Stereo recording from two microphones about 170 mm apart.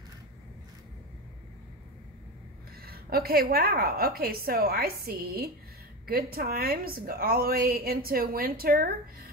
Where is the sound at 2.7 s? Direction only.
65° right (ahead or behind).